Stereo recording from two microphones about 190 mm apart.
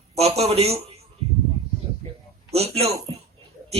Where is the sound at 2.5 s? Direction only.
30° right (ahead or behind).